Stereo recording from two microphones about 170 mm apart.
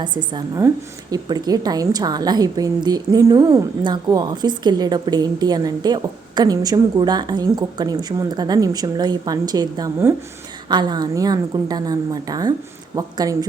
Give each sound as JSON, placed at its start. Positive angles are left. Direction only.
{"t": 0.0, "sound": "a woman's voice", "side_deg": -25}